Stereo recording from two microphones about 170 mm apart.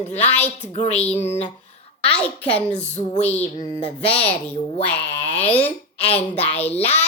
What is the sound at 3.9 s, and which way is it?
A child's voice, 10° left (ahead or behind).